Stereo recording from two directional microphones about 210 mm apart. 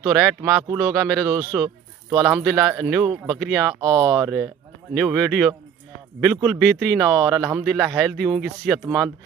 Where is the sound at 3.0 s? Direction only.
20° right (ahead or behind).